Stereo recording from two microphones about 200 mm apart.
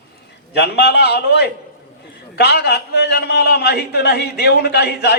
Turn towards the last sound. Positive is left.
turn(degrees=55)  # may be behind; listen again after turning